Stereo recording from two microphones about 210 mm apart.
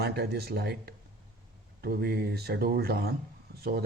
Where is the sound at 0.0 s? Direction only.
50° right (ahead or behind).